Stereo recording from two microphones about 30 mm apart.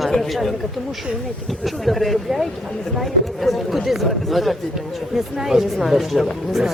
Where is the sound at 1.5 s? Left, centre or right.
Centre.